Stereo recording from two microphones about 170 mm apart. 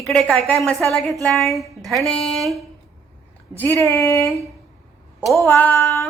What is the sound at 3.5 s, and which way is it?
Female singing, 10° left (ahead or behind).